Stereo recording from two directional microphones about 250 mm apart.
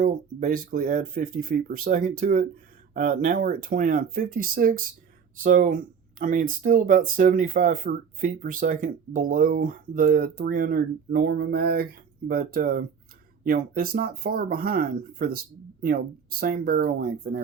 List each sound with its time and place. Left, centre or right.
0.0 s speech: right
16.4 s speech: right